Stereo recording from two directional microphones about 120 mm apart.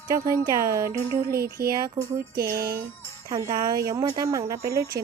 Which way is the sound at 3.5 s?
35° right (ahead or behind).